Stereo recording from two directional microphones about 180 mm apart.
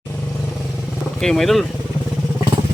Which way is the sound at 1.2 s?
Centre (ahead or behind).